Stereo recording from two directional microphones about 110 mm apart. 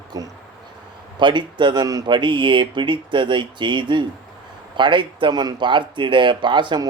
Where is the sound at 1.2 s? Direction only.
45° right (ahead or behind).